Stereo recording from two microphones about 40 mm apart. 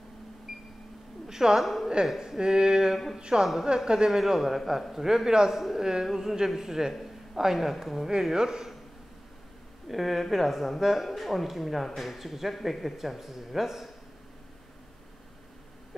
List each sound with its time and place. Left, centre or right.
0.5 s a sound: centre
1.3 s a woman's voice: centre
1.6 s speech: centre
4.2 s speech: centre
9.8 s speech: centre